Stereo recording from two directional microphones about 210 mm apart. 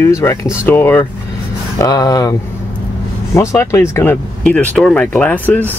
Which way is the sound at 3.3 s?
15° left (ahead or behind).